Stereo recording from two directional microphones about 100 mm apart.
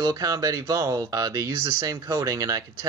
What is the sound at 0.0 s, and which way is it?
Speech, 35° right (ahead or behind).